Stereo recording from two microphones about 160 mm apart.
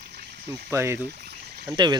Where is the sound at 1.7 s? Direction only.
25° right (ahead or behind).